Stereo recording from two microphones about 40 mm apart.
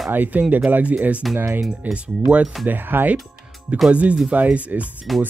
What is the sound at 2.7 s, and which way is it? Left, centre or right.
Speech, right.